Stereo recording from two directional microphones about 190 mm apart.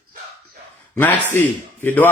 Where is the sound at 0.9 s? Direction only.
10° left (ahead or behind).